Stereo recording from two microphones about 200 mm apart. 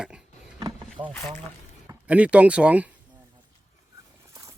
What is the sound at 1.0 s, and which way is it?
Speech, 25° right (ahead or behind).